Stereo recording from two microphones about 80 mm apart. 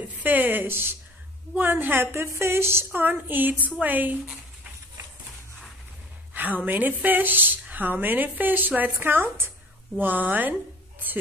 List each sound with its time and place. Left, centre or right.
0.2 s a woman's voice: right
6.3 s a woman's voice: right